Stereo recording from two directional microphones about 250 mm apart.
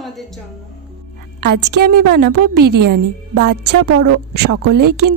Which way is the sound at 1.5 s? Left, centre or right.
Right.